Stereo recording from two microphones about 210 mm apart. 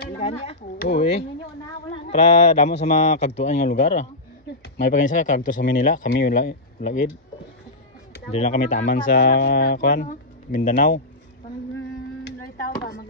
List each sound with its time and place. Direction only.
0.2 s speech: 30° left (ahead or behind)
8.3 s speech: 30° left (ahead or behind)